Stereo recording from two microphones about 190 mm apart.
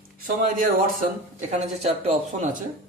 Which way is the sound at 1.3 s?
35° right (ahead or behind).